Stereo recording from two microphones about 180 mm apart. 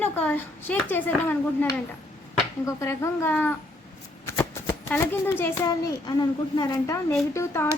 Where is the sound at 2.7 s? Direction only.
15° left (ahead or behind).